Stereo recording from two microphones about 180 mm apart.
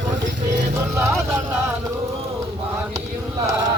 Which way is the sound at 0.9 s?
15° right (ahead or behind).